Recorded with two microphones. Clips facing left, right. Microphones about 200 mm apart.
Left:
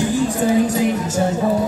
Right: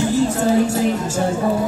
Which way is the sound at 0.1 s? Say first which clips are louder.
Right 1 dB; 15° left (ahead or behind).